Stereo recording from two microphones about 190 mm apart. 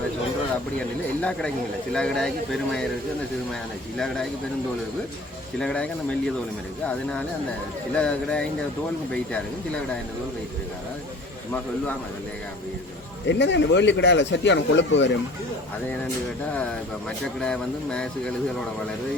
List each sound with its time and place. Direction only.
0.8 s speech: 5° left (ahead or behind)
3.9 s speech: centre (ahead or behind)
5.5 s speech: 5° left (ahead or behind)
13.2 s speech: 70° left (ahead or behind)
17.4 s speech: 5° left (ahead or behind)